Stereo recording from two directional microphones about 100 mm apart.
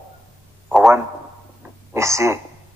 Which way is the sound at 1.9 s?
30° right (ahead or behind).